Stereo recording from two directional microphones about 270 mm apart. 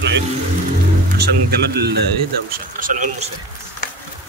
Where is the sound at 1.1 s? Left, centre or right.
Right.